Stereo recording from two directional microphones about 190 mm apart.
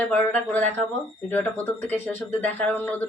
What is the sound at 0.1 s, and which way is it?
Speech, 10° left (ahead or behind).